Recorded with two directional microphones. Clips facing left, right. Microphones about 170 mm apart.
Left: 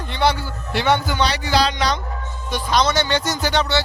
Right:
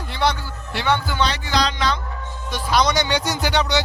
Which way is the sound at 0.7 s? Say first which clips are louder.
Left 3 dB; 20° left (ahead or behind).